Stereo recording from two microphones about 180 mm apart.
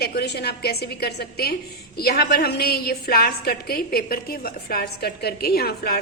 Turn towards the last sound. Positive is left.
turn(degrees=60)  # may be behind; listen again after turning